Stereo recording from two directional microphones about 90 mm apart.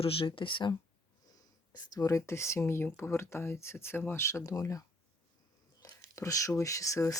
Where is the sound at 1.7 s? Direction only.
45° left (ahead or behind).